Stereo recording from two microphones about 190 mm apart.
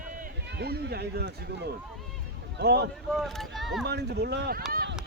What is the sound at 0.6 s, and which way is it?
Speech, 55° right (ahead or behind).